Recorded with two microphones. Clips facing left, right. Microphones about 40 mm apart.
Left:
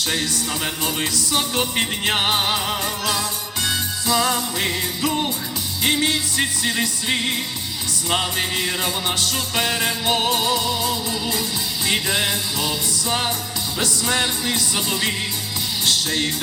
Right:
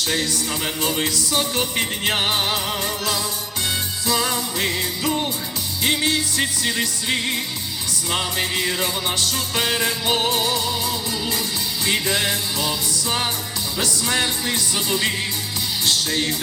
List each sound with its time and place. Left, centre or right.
0.9 s music: left
2.0 s music: centre
4.0 s music: left
8.2 s music: left
10.3 s music: left
13.7 s music: left